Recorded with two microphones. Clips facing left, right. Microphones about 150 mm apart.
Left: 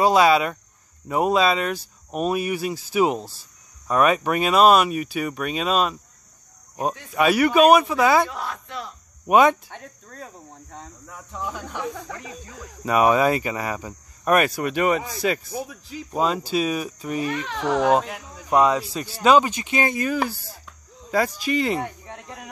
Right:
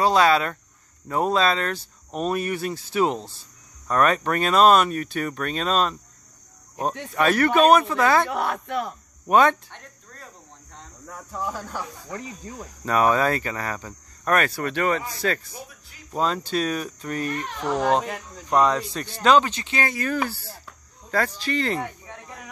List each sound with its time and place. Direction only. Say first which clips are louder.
0.0 s speech: left 2 dB; 10° left (ahead or behind)
7.2 s speech: left 2 dB; 10° left (ahead or behind)
8.3 s speech: right 6 dB; 60° right (ahead or behind)
9.3 s speech: left 2 dB; 10° left (ahead or behind)
12.8 s speech: left 2 dB; 10° left (ahead or behind)
17.3 s speech: left 3 dB; 90° left
17.8 s speech: left 1 dB; 5° left (ahead or behind)